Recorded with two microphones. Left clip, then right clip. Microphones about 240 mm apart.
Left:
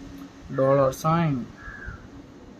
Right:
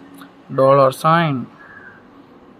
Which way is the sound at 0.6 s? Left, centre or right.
Centre.